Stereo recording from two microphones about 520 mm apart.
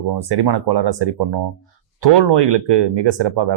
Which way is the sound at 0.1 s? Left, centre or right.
Right.